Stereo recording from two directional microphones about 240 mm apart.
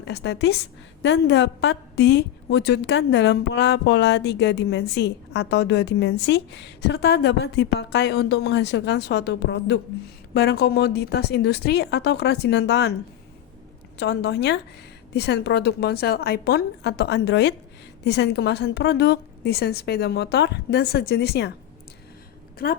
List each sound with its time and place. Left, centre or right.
0.0 s a woman's voice: left
14.0 s a woman's voice: left
22.6 s a woman's voice: left